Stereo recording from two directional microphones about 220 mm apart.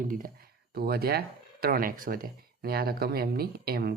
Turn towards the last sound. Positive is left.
turn(degrees=-45)  # may be behind; listen again after turning